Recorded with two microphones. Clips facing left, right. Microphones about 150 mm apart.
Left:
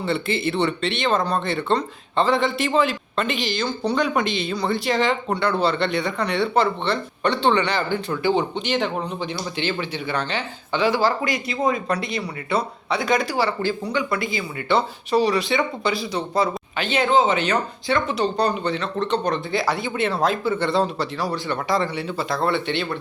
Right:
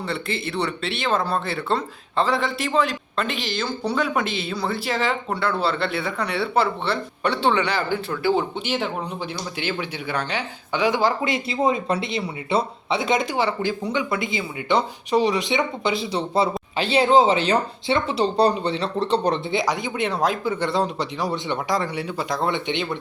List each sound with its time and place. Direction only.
0.0 s speech: centre (ahead or behind); by 23.0 s 20° right (ahead or behind)